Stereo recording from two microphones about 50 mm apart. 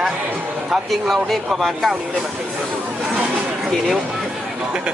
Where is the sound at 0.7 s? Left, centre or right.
Centre.